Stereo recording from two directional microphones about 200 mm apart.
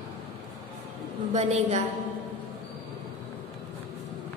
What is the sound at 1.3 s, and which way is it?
Speech, 35° right (ahead or behind).